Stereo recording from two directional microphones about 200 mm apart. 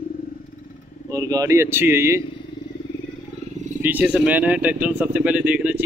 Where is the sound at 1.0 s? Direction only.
15° right (ahead or behind).